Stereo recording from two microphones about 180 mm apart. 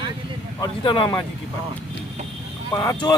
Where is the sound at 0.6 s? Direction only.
25° left (ahead or behind).